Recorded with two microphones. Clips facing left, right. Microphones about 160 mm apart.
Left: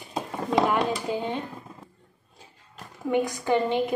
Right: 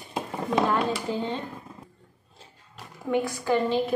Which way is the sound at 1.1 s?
15° left (ahead or behind).